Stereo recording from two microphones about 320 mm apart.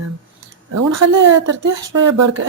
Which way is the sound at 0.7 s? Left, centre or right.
Right.